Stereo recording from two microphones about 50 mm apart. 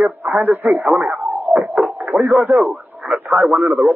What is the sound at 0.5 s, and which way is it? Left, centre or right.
Speech, right.